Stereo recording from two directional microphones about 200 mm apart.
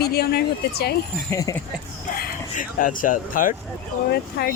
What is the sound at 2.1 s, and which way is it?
Speech, 45° left (ahead or behind).